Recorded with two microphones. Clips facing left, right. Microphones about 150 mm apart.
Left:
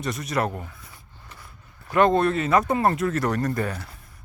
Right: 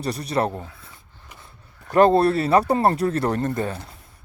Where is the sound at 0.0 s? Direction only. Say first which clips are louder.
Right 3 dB; 35° right (ahead or behind).